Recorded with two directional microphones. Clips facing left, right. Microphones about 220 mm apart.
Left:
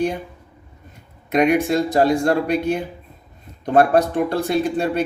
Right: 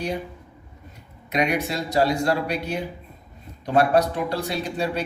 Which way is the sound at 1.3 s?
50° left (ahead or behind).